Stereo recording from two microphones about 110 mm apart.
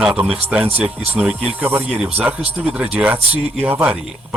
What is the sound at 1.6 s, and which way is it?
Speech, 20° right (ahead or behind).